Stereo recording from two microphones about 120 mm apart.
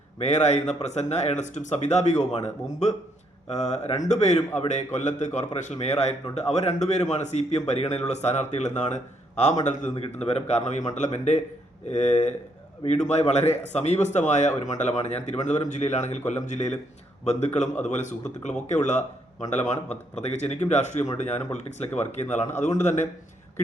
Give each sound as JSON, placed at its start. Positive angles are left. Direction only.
{"t": 0.2, "sound": "speech", "side_deg": 70}
{"t": 9.9, "sound": "speech", "side_deg": 60}